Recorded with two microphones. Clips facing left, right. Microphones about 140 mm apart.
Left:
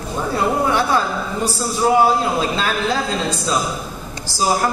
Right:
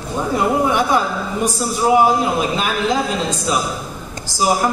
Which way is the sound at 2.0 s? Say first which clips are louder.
Right 1 dB; 15° right (ahead or behind).